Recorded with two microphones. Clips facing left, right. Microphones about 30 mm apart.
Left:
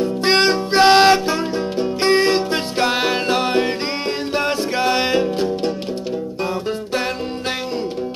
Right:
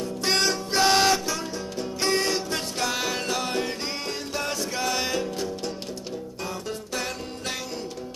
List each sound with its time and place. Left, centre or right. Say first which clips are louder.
0.0 s music: left 9 dB; left